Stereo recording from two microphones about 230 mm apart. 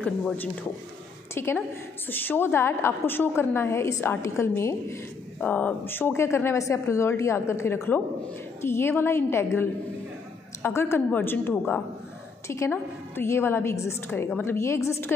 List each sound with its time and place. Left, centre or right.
0.0 s a woman's voice: centre